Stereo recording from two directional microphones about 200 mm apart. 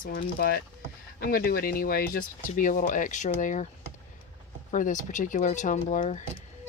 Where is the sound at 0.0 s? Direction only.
50° left (ahead or behind).